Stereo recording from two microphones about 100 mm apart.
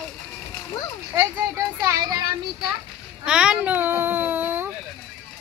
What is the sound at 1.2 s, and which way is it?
Speech, 30° right (ahead or behind).